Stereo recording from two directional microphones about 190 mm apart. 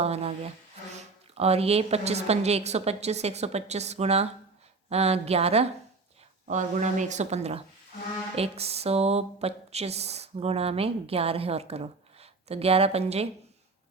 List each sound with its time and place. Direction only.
0.0 s speech: 35° right (ahead or behind)